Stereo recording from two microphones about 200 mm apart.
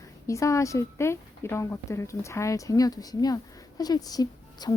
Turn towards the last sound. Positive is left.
turn(degrees=20)  # may be behind; listen again after turning